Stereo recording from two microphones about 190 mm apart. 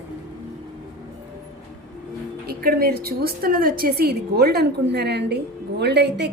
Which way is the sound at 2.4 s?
50° right (ahead or behind).